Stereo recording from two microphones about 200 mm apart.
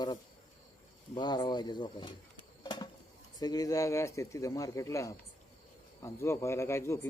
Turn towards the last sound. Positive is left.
turn(degrees=15)  # may be behind; listen again after turning